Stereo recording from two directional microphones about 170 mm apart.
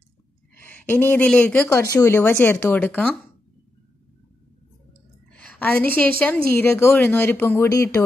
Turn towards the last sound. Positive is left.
turn(degrees=15)  # may be behind; listen again after turning